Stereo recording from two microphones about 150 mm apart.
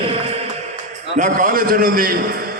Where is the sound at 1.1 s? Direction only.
60° right (ahead or behind); by 2.5 s 85° right.